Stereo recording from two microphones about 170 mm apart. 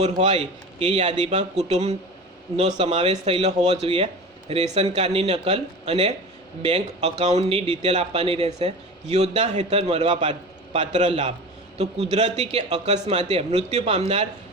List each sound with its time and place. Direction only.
0.2 s speech: 40° right (ahead or behind)